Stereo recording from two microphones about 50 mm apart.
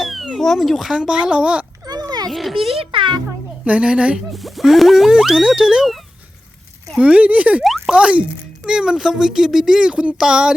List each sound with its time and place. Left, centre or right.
0.0 s speech: centre
1.2 s speech: right
2.3 s a sound: centre
3.7 s speech: right
4.3 s boing: centre
5.6 s a child's voice: centre
7.0 s speech: right
7.6 s a sound: centre
7.9 s a child's voice: right
9.9 s a child's voice: right